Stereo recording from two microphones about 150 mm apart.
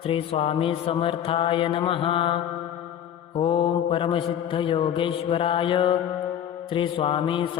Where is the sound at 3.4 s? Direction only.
35° left (ahead or behind).